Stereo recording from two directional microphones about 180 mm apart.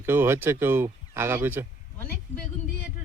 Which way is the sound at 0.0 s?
10° right (ahead or behind).